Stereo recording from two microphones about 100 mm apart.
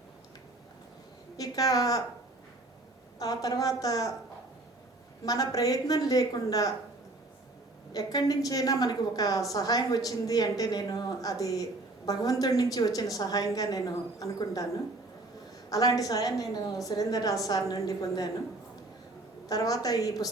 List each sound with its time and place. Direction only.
1.4 s a woman's voice: 40° left (ahead or behind)
3.2 s a woman's voice: 40° left (ahead or behind)
5.2 s a woman's voice: 40° left (ahead or behind)
7.9 s a woman's voice: 35° left (ahead or behind)
15.7 s a woman's voice: 35° left (ahead or behind)
19.5 s a woman's voice: 35° left (ahead or behind)